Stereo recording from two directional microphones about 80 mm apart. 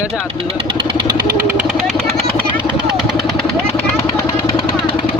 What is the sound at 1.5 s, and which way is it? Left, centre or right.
Vehicle, centre.